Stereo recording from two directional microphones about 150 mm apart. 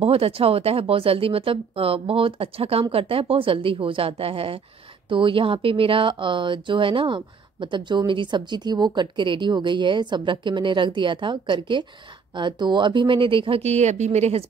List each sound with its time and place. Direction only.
0.0 s speech: 40° right (ahead or behind)